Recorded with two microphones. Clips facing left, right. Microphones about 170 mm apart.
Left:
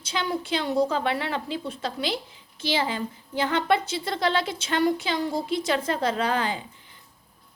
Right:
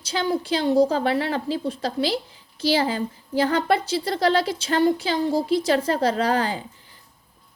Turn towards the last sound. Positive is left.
turn(degrees=-35)  # may be behind; listen again after turning